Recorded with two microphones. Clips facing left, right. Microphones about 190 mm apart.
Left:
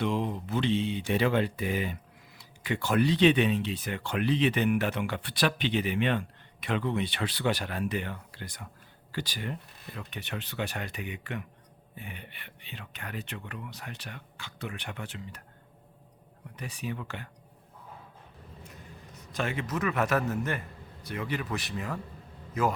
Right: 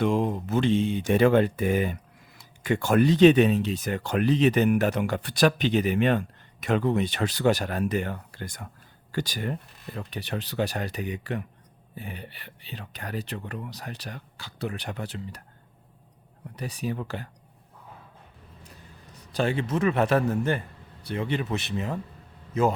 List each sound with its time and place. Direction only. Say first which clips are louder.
0.0 s speech: right 5 dB; 45° right (ahead or behind)
16.6 s speech: right 5 dB; 40° right (ahead or behind)
19.3 s speech: right 6 dB; 30° right (ahead or behind)